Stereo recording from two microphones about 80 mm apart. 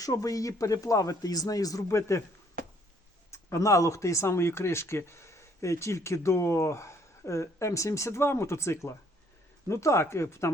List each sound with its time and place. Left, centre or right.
0.0 s speech: left
3.3 s speech: left